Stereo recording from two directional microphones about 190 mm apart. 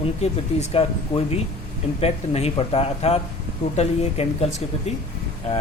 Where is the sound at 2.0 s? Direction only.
35° left (ahead or behind).